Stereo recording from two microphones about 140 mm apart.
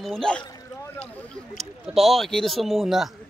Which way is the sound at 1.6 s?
Centre (ahead or behind).